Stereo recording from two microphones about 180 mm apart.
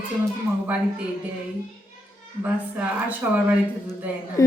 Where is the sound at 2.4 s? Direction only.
10° right (ahead or behind).